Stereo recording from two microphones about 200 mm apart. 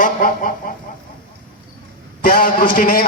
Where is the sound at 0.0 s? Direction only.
40° left (ahead or behind).